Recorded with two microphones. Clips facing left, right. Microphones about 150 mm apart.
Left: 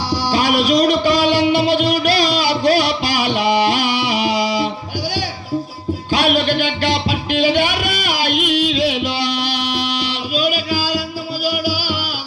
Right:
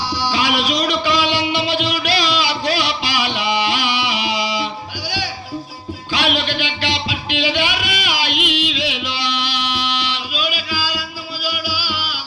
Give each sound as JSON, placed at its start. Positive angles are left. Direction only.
{"t": 0.1, "sound": "music", "side_deg": 50}
{"t": 6.1, "sound": "music", "side_deg": 45}